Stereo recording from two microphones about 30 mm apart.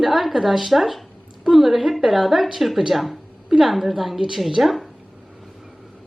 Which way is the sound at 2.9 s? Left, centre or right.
Centre.